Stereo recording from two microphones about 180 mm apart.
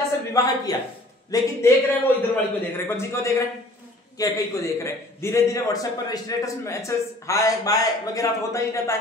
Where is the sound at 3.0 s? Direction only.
15° left (ahead or behind).